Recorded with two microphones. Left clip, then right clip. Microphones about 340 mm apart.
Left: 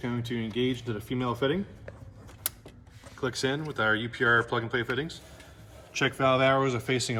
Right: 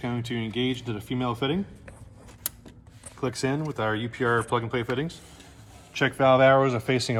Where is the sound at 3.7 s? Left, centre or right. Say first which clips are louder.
Left 1 dB; centre.